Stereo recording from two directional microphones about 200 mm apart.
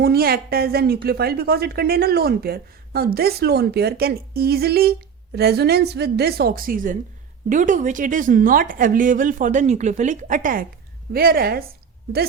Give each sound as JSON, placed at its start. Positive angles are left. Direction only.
{"t": 0.0, "sound": "a woman's voice", "side_deg": -50}